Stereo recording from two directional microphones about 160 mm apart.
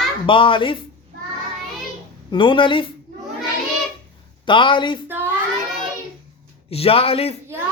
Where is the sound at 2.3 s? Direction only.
30° left (ahead or behind).